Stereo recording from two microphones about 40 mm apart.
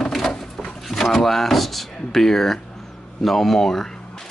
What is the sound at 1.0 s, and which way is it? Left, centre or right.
Speech, centre.